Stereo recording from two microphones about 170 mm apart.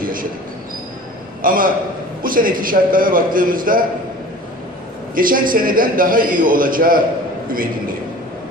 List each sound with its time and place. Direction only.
0.0 s a sound: 55° right (ahead or behind)
1.4 s a man's voice: 55° right (ahead or behind)
5.1 s a man's voice: 55° right (ahead or behind)